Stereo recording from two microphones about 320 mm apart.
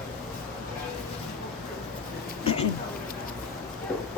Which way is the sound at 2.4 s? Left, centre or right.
Centre.